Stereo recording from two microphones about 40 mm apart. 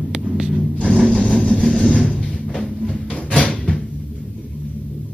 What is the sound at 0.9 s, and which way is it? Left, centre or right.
Music, centre.